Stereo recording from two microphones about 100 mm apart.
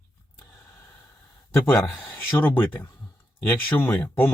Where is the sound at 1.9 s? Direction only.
15° left (ahead or behind).